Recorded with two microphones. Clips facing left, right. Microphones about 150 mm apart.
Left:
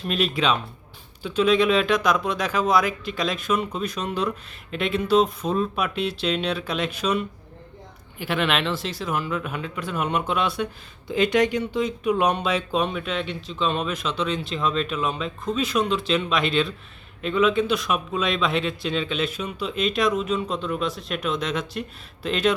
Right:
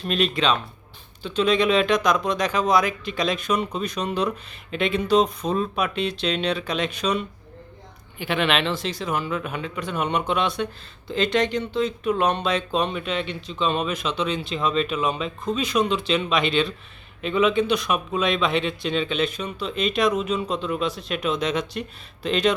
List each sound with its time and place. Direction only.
0.0 s speech: 5° left (ahead or behind)